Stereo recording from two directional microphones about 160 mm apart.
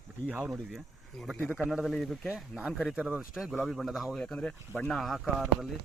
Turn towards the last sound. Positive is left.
turn(degrees=0)  # may be behind; listen again after turning